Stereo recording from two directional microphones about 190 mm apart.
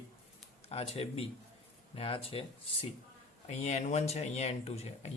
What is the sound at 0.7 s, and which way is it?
Speech, 30° left (ahead or behind).